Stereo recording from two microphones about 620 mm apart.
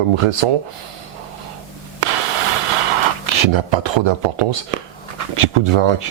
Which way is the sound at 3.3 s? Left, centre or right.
Right.